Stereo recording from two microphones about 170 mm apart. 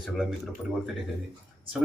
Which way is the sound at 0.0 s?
Centre (ahead or behind).